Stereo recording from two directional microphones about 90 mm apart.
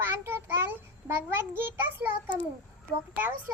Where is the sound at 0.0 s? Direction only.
25° right (ahead or behind).